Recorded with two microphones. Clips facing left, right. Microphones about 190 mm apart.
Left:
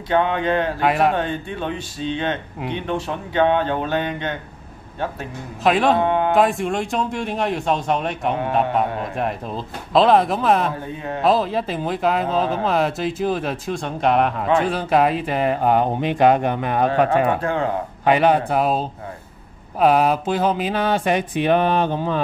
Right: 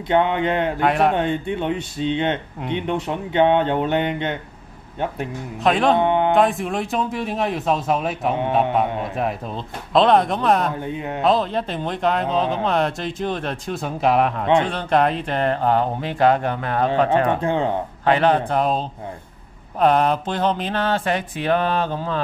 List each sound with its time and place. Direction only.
0.1 s speech: 20° right (ahead or behind)
0.7 s speech: centre (ahead or behind)
1.1 s speech: 20° right (ahead or behind)
5.6 s speech: centre (ahead or behind)
5.9 s music: 20° right (ahead or behind)
6.3 s speech: centre (ahead or behind)
17.4 s speech: 20° right (ahead or behind)
18.0 s speech: 10° left (ahead or behind)